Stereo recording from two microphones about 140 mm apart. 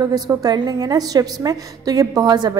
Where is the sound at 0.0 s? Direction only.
25° right (ahead or behind).